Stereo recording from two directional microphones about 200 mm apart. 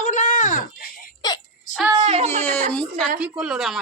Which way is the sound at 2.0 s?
30° right (ahead or behind).